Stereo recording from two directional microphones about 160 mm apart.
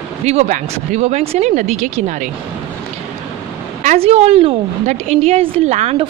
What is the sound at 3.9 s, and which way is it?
A woman's voice, 40° right (ahead or behind).